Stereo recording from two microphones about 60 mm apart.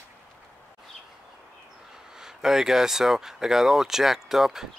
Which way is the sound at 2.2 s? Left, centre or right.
Centre.